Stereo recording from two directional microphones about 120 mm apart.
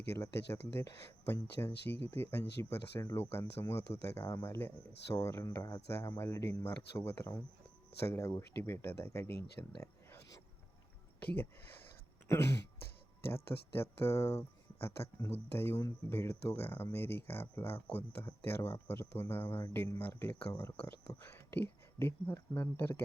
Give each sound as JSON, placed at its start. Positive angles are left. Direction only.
{"t": 0.1, "sound": "speech", "side_deg": 25}
{"t": 11.2, "sound": "a sound", "side_deg": 15}
{"t": 12.3, "sound": "speech", "side_deg": 20}